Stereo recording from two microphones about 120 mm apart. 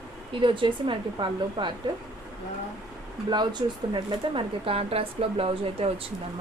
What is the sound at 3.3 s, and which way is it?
Speech, 35° right (ahead or behind).